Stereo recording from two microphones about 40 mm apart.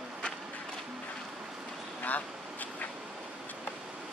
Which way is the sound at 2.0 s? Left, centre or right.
Left.